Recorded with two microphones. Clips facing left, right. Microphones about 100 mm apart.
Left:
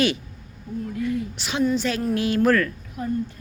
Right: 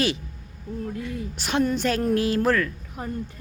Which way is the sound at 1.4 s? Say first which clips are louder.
Right 2 dB; 50° right (ahead or behind).